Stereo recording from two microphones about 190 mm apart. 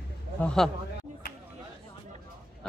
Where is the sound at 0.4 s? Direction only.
5° left (ahead or behind).